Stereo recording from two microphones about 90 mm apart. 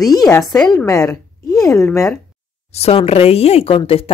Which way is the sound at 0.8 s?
35° left (ahead or behind).